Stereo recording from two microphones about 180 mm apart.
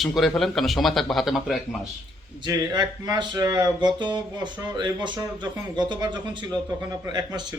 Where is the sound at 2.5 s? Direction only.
25° right (ahead or behind).